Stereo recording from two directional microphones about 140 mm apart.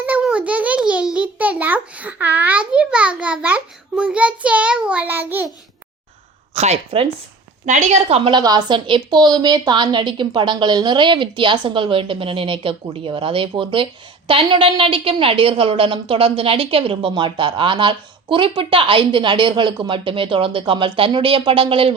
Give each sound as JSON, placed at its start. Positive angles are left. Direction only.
{"t": 0.0, "sound": "a sound", "side_deg": -10}
{"t": 6.5, "sound": "speech", "side_deg": -50}
{"t": 7.6, "sound": "a woman's voice", "side_deg": -60}
{"t": 8.3, "sound": "a woman's voice", "side_deg": -30}